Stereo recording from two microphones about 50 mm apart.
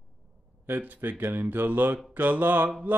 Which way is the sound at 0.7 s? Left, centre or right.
Right.